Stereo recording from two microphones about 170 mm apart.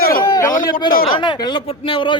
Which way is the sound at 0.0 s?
60° left (ahead or behind).